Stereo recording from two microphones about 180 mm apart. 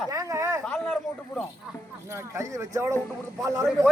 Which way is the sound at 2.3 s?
20° right (ahead or behind).